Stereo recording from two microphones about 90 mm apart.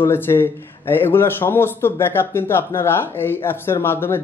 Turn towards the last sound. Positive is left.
turn(degrees=25)  # may be behind; listen again after turning